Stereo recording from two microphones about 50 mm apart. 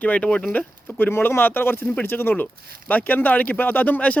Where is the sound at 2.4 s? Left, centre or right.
Left.